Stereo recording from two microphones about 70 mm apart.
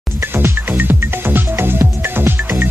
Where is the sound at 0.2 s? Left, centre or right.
Right.